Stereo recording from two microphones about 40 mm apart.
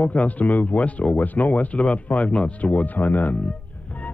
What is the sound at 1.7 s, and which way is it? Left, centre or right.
Speech, left.